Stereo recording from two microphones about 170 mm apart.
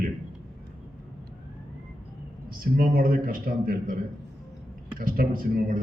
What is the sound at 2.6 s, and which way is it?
Speech, 60° right (ahead or behind).